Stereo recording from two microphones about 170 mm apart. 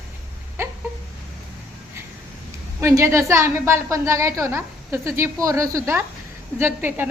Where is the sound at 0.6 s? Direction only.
15° right (ahead or behind).